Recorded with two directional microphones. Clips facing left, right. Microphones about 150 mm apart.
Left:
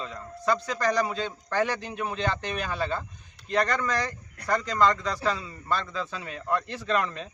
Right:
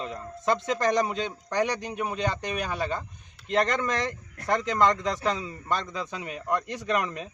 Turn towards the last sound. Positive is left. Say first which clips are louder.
# even
turn(degrees=-15)  # may be behind; listen again after turning